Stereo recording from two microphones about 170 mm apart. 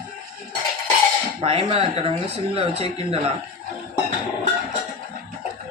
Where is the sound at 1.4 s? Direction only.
35° right (ahead or behind).